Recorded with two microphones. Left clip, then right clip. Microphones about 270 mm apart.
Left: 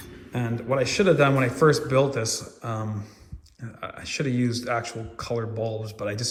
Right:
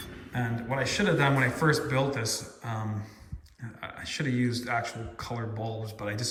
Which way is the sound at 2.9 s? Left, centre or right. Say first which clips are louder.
Left 2 dB; centre.